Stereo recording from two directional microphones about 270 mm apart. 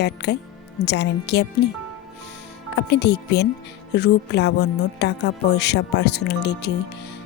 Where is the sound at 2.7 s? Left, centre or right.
Left.